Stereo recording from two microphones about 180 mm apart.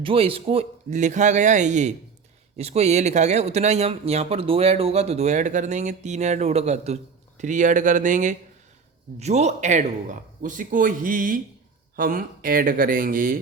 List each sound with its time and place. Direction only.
0.0 s a man's voice: 30° right (ahead or behind); by 13.4 s 50° right (ahead or behind)